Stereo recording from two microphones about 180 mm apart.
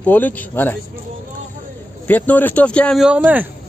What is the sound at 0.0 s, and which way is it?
Speech, 10° left (ahead or behind).